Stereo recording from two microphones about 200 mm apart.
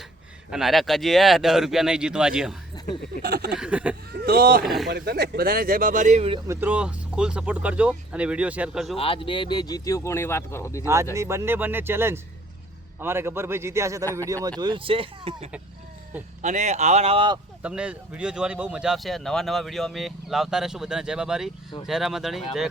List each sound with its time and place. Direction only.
0.5 s speech: centre (ahead or behind)
3.2 s speech: 50° right (ahead or behind)
3.6 s a man's voice: 5° right (ahead or behind)
4.1 s speech: 50° right (ahead or behind)
4.6 s speech: centre (ahead or behind)
4.9 s speech: 55° right (ahead or behind); by 6.4 s 30° right (ahead or behind)
6.5 s speech: 10° right (ahead or behind)
9.0 s speech: 25° left (ahead or behind)
11.1 s a man's voice: 15° right (ahead or behind)
17.6 s speech: 5° right (ahead or behind)